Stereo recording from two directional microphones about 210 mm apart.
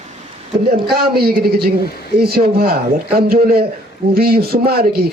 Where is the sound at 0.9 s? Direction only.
50° right (ahead or behind).